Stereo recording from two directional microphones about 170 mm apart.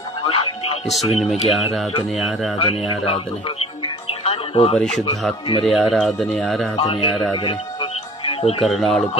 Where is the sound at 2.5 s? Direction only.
35° left (ahead or behind).